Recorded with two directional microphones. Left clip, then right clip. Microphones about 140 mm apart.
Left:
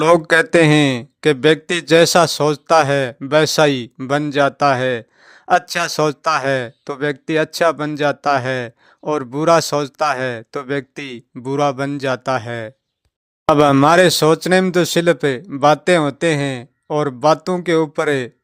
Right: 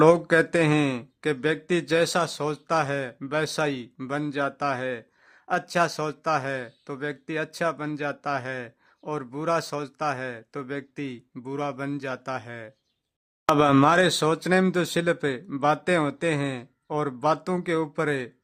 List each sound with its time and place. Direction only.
0.0 s speech: 45° left (ahead or behind)
13.8 s speech: 35° left (ahead or behind)